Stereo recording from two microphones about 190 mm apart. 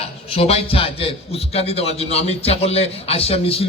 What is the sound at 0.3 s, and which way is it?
A man's voice, 30° left (ahead or behind).